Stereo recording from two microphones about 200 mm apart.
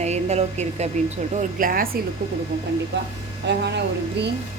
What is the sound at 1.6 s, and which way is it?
Speech, 45° right (ahead or behind).